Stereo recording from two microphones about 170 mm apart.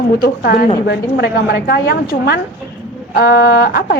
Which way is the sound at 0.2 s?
65° left (ahead or behind).